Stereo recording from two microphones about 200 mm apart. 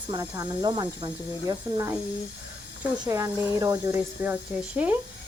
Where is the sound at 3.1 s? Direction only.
15° right (ahead or behind).